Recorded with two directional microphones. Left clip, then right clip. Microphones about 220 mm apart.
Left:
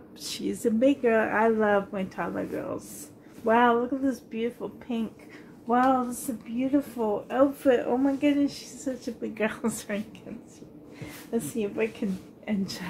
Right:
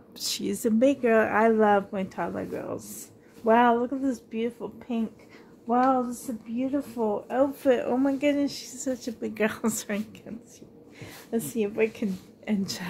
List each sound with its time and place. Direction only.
0.2 s a woman's voice: 50° right (ahead or behind)
11.3 s a woman's voice: 50° right (ahead or behind)